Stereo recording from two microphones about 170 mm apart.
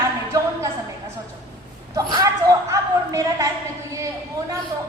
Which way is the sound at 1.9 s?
20° right (ahead or behind).